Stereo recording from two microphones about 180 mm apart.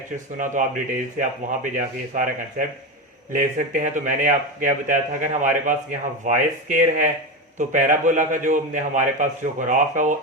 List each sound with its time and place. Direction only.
0.6 s a man's voice: 45° right (ahead or behind)